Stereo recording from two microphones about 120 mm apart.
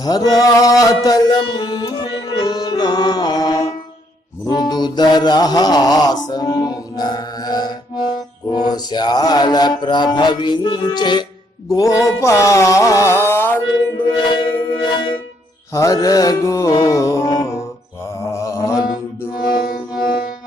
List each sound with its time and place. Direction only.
0.0 s music: 35° left (ahead or behind)
4.4 s mantra: 35° left (ahead or behind)
11.7 s mantra: 30° left (ahead or behind)
14.3 s music: 40° left (ahead or behind)
15.7 s mantra: 30° left (ahead or behind)